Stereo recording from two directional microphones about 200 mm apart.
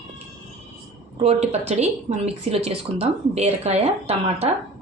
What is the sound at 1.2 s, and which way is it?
Speech, 30° right (ahead or behind).